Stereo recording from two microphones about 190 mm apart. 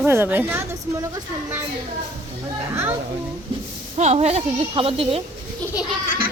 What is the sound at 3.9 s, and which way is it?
A woman's voice, 35° right (ahead or behind).